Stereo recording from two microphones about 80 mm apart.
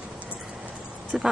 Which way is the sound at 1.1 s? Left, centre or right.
Centre.